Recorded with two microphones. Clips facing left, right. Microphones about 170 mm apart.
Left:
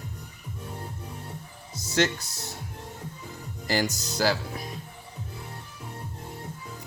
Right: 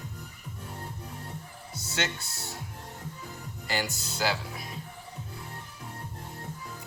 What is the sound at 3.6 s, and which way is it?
Speech, 40° left (ahead or behind).